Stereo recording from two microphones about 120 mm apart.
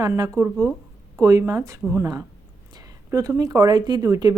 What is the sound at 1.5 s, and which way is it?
Speech, 25° right (ahead or behind).